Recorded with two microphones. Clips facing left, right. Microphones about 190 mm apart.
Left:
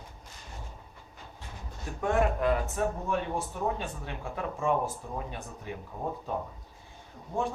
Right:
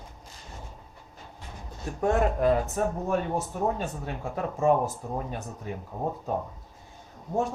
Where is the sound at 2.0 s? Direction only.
35° right (ahead or behind).